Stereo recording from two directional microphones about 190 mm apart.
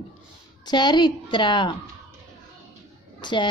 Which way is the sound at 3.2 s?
25° left (ahead or behind).